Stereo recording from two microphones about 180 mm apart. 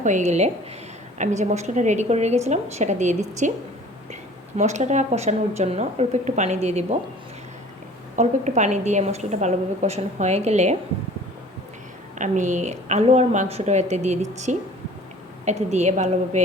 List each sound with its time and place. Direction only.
0.0 s speech: 40° right (ahead or behind)
8.1 s speech: 40° right (ahead or behind)
12.2 s speech: 45° right (ahead or behind)